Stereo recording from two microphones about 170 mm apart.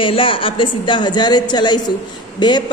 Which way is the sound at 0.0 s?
30° left (ahead or behind).